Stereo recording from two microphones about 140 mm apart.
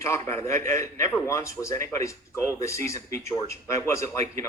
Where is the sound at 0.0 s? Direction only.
20° left (ahead or behind).